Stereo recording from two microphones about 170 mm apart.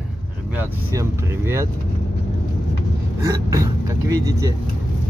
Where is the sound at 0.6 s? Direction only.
15° right (ahead or behind).